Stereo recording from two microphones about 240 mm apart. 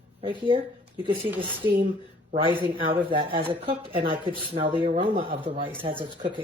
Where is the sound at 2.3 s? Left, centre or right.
Right.